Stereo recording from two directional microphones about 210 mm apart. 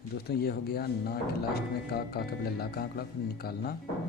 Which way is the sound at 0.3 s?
50° left (ahead or behind).